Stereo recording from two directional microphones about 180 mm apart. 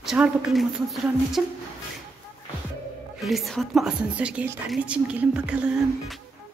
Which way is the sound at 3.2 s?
Centre (ahead or behind).